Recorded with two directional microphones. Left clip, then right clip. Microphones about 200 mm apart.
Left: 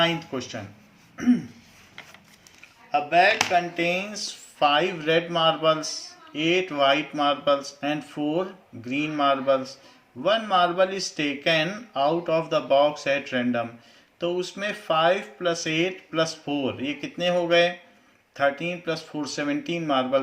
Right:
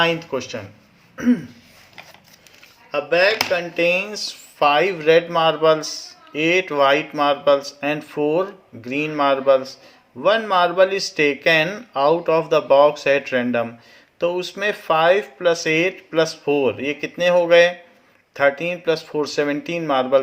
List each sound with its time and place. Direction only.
0.0 s speech: 40° right (ahead or behind)
1.1 s throat clearing: 40° right (ahead or behind)
2.9 s speech: 45° right (ahead or behind)